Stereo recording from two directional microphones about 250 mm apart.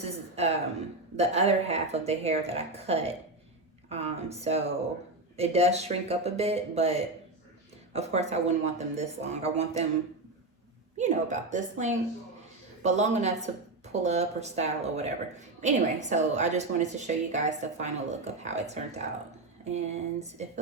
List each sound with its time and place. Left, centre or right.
0.0 s a woman's voice: right
10.9 s a woman's voice: right